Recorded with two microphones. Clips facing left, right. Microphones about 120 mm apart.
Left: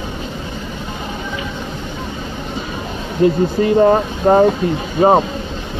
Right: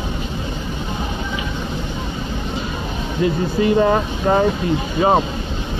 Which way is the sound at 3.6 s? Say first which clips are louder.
Left 3 dB; 35° left (ahead or behind).